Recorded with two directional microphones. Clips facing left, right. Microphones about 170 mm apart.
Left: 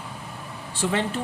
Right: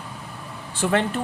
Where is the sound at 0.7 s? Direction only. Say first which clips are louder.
Right 4 dB; 55° right (ahead or behind).